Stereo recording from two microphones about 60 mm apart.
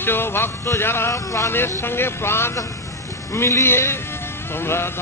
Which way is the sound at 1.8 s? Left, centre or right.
Left.